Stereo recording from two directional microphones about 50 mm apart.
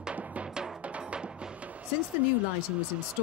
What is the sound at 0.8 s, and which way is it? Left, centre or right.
Music, right.